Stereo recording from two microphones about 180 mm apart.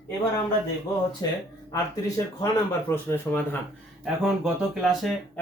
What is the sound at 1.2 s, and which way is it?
Speech, 20° left (ahead or behind).